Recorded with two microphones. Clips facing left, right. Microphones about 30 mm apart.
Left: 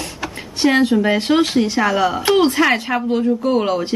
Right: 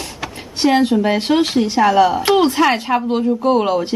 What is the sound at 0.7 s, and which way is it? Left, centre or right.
Speech, centre.